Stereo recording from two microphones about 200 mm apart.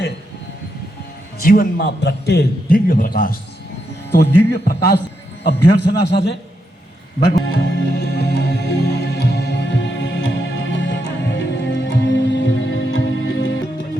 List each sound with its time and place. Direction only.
1.4 s a man's voice: 45° left (ahead or behind)
4.1 s a man's voice: 60° left (ahead or behind)
7.4 s music: 55° left (ahead or behind); by 13.5 s 75° left (ahead or behind)